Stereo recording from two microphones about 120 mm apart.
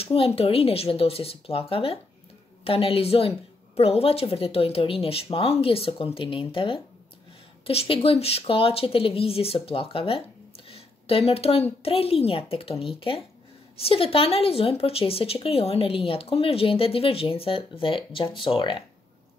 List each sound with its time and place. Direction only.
0.0 s speech: 55° left (ahead or behind)
10.7 s a sound: 55° left (ahead or behind)
11.8 s speech: 55° left (ahead or behind)